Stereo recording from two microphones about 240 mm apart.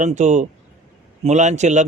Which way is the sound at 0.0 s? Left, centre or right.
Right.